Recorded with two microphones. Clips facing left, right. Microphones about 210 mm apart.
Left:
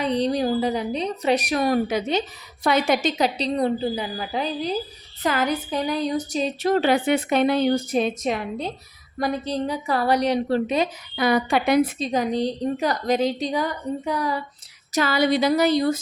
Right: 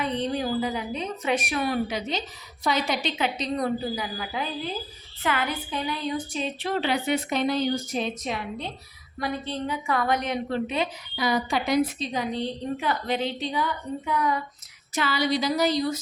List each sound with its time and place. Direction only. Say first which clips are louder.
0.0 s a woman's voice: left 5 dB; 35° left (ahead or behind)
11.2 s a woman's voice: left 5 dB; 60° left (ahead or behind); by 14.4 s 35° left (ahead or behind)
14.9 s a woman's voice: left 5 dB; 45° left (ahead or behind)